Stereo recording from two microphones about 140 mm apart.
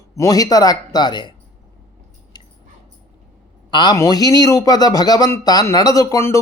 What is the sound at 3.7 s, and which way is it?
Speech, 30° left (ahead or behind).